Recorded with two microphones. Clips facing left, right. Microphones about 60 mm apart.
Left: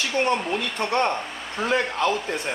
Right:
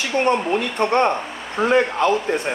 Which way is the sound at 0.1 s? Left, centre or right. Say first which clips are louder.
Right 6 dB; centre.